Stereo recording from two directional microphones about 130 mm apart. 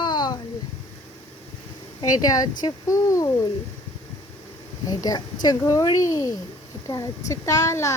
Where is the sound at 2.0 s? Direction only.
30° left (ahead or behind).